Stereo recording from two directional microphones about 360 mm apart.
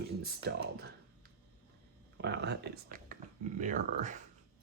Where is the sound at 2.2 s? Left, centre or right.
Right.